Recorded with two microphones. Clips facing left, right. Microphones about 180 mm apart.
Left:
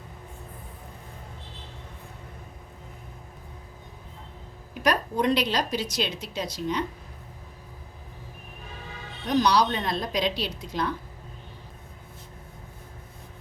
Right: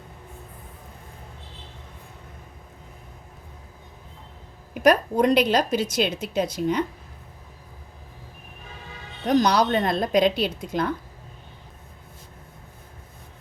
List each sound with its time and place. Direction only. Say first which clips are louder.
4.7 s a woman's voice: right 7 dB; 50° right (ahead or behind)
9.2 s a woman's voice: right 3 dB; 50° right (ahead or behind)